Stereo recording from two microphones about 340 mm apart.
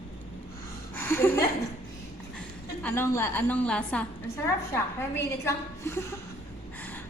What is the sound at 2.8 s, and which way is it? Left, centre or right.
A woman's voice, centre.